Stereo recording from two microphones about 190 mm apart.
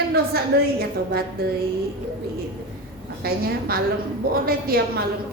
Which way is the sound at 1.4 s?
55° right (ahead or behind).